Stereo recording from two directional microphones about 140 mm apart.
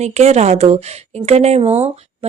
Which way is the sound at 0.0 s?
50° right (ahead or behind).